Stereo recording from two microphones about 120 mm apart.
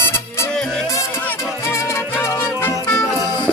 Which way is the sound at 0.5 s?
5° left (ahead or behind).